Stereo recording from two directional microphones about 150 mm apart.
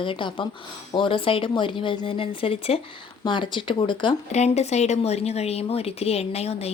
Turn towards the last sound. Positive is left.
turn(degrees=45)  # may be behind; listen again after turning